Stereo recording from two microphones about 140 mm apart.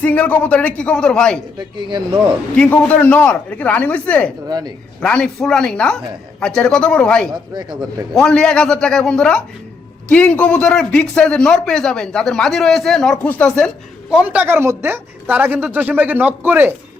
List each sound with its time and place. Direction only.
0.0 s speech: 10° left (ahead or behind)
1.5 s speech: 35° right (ahead or behind)
2.6 s speech: 10° left (ahead or behind)
4.4 s speech: 30° right (ahead or behind)
4.9 s speech: 5° left (ahead or behind)
7.5 s speech: 30° right (ahead or behind)
8.1 s speech: 5° left (ahead or behind)
14.1 s a woman's voice: 10° right (ahead or behind)